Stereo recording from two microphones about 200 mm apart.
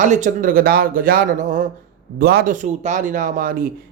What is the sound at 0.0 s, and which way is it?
Speech, 40° right (ahead or behind).